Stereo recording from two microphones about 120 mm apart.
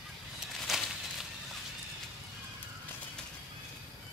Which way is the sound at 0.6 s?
Centre (ahead or behind).